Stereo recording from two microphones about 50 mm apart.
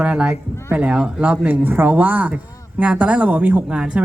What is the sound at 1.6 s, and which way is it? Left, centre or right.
A woman's voice, right.